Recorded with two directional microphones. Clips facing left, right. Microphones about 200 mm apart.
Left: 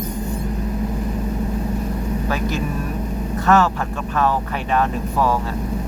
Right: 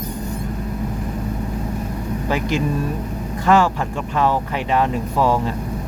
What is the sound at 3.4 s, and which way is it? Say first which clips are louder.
Speech: right 1 dB; 15° right (ahead or behind).